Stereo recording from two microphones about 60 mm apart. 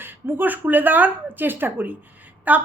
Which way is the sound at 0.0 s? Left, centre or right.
Right.